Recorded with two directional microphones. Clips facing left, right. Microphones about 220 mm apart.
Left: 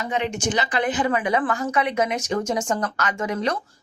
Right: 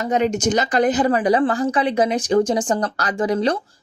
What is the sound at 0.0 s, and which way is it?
Speech, 40° right (ahead or behind).